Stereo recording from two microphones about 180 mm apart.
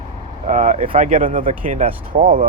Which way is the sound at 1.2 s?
50° right (ahead or behind).